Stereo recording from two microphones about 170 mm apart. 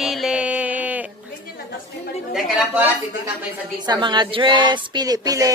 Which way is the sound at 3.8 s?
25° right (ahead or behind).